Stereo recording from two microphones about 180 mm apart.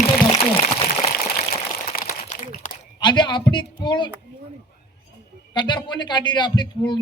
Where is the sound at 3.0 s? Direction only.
25° left (ahead or behind).